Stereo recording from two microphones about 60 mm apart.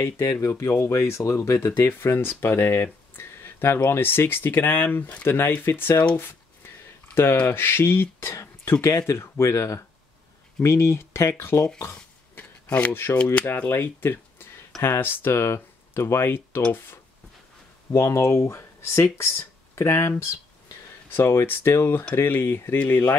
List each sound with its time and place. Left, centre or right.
0.0 s speech: left
0.7 s speech: left
1.7 s speech: left
7.3 s speech: left
11.8 s a sound: left
12.6 s speech: centre
13.5 s speech: left
13.8 s a sound: left
14.8 s speech: left
15.3 s speech: left
17.9 s speech: left